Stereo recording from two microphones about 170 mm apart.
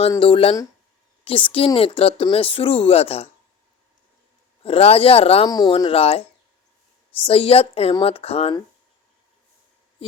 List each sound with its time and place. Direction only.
0.2 s speech: 30° left (ahead or behind)
4.6 s speech: 35° left (ahead or behind)